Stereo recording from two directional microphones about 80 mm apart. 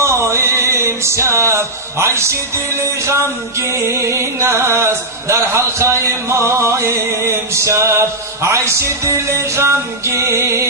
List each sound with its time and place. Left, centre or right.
0.0 s music: right
3.6 s music: right